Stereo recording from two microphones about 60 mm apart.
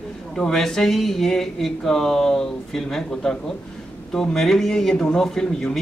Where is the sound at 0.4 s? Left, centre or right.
Centre.